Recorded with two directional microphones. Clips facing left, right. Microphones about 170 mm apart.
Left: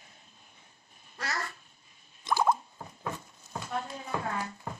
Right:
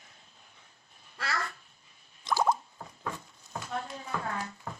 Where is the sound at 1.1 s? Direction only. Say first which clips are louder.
Right 1 dB; 20° left (ahead or behind).